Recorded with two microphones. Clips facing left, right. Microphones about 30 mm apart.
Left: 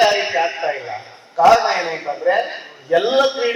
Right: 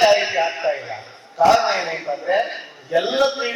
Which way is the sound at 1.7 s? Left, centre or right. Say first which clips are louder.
Left 2 dB; centre.